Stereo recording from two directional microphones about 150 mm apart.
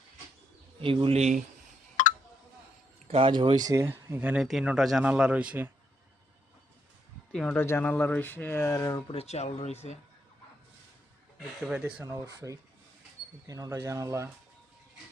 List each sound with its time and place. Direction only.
1.0 s a man's voice: 45° right (ahead or behind)
2.0 s a sound: 60° left (ahead or behind)
3.1 s speech: 35° right (ahead or behind); by 3.9 s 20° right (ahead or behind)
4.1 s speech: 10° right (ahead or behind)
7.3 s speech: 10° left (ahead or behind); by 9.1 s 25° left (ahead or behind)
9.1 s speech: 45° left (ahead or behind)
11.7 s speech: 10° right (ahead or behind)
12.0 s speech: 25° right (ahead or behind)